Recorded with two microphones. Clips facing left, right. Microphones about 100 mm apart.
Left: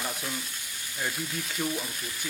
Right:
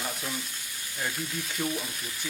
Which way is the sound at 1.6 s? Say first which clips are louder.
Even; 5° left (ahead or behind).